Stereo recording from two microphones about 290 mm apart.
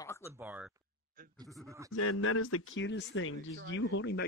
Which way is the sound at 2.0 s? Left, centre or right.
Left.